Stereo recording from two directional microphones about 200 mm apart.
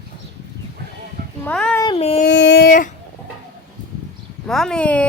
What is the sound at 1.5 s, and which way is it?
Speech, 5° left (ahead or behind).